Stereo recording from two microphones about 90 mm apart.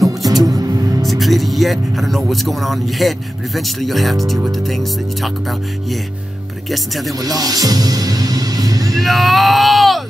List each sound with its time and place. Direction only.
0.2 s music: 45° right (ahead or behind)
1.0 s speech: centre (ahead or behind)
7.2 s speech: 45° right (ahead or behind)
8.9 s speech: centre (ahead or behind)